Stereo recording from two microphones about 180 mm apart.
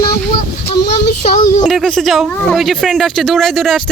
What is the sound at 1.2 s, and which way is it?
Child singing, 40° left (ahead or behind).